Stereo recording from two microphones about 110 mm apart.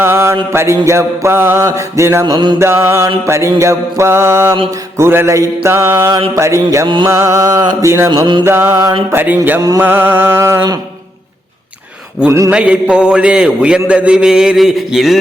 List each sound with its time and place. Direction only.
0.0 s mantra: 25° right (ahead or behind)
2.2 s mantra: 45° right (ahead or behind)
2.6 s mantra: 25° right (ahead or behind)
6.8 s mantra: 45° right (ahead or behind)
7.1 s music: 25° right (ahead or behind)
7.8 s mantra: 25° right (ahead or behind)
9.1 s a man's voice: 15° right (ahead or behind)
9.6 s music: 30° right (ahead or behind)
9.8 s mantra: 15° right (ahead or behind)
12.5 s a man's voice: 10° right (ahead or behind)